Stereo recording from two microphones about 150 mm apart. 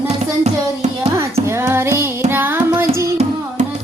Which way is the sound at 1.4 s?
15° right (ahead or behind).